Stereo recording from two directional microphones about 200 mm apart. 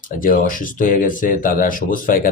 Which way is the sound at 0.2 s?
45° left (ahead or behind).